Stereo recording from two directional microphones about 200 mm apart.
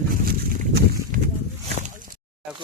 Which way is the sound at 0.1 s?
45° right (ahead or behind).